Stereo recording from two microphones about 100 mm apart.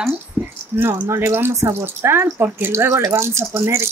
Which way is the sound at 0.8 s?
25° right (ahead or behind).